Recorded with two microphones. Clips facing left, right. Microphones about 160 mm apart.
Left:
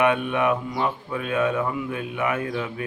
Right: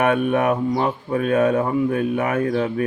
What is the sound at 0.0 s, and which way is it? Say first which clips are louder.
Speech: right 3 dB; 45° right (ahead or behind).